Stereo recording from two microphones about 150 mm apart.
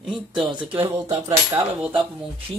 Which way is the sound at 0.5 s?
35° right (ahead or behind).